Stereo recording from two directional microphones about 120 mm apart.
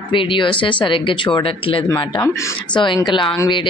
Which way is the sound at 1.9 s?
40° left (ahead or behind).